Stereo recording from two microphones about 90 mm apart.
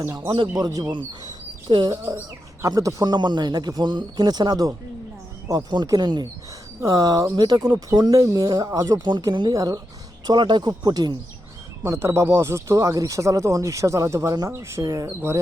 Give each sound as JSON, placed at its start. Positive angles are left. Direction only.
{"t": 0.5, "sound": "speech", "side_deg": -45}
{"t": 1.2, "sound": "bird", "side_deg": -50}
{"t": 2.0, "sound": "speech", "side_deg": -30}
{"t": 2.6, "sound": "speech", "side_deg": -45}
{"t": 6.8, "sound": "speech", "side_deg": -45}
{"t": 10.2, "sound": "speech", "side_deg": -55}
{"t": 11.8, "sound": "speech", "side_deg": -30}